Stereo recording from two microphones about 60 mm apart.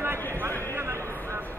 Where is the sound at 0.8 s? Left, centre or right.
Right.